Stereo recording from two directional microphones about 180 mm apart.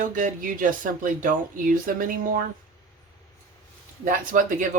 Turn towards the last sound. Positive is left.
turn(degrees=-50)  # may be behind; listen again after turning